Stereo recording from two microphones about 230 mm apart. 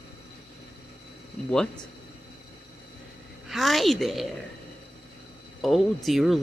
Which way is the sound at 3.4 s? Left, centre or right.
Centre.